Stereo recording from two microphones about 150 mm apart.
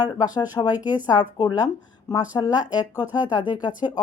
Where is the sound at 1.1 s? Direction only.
30° left (ahead or behind).